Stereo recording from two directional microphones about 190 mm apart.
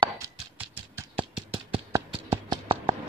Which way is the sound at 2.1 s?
30° right (ahead or behind).